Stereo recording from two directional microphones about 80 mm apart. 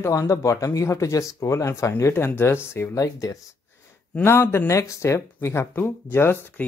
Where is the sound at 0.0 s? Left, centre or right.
Left.